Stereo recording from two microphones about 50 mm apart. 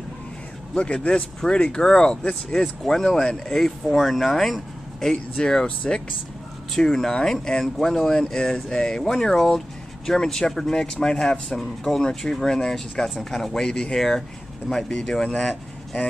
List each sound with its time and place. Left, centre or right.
0.7 s a man's voice: left
2.8 s speech: centre
5.1 s speech: centre
11.5 s speech: centre